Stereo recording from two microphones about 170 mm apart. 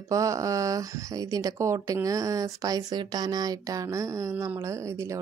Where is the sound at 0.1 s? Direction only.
20° right (ahead or behind).